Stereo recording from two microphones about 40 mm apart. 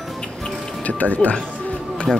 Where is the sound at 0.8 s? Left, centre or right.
Left.